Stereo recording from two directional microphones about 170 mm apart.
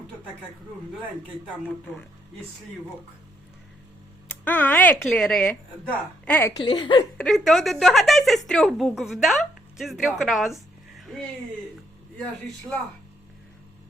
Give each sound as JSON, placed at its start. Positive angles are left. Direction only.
{"t": 4.3, "sound": "a woman's voice", "side_deg": 10}
{"t": 6.7, "sound": "speech", "side_deg": 30}
{"t": 7.2, "sound": "a woman's voice", "side_deg": 0}